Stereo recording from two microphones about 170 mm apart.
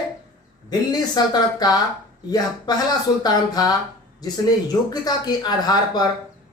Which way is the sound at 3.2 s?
20° left (ahead or behind).